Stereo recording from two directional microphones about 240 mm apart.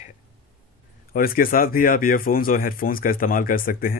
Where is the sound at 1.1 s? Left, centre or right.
Left.